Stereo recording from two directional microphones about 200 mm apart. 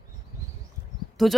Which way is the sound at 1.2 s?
Centre (ahead or behind).